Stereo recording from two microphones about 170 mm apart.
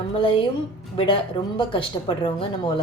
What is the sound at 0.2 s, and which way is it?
A woman's voice, 30° left (ahead or behind).